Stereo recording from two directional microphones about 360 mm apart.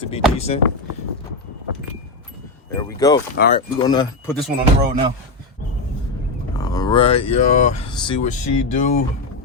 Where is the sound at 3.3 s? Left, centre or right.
Left.